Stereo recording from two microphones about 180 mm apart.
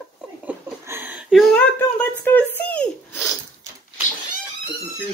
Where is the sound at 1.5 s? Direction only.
10° left (ahead or behind).